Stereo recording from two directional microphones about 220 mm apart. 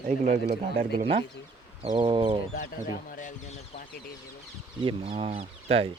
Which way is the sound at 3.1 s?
35° left (ahead or behind).